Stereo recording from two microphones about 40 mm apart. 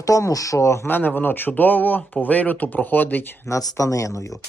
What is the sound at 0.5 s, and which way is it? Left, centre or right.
Speech, left.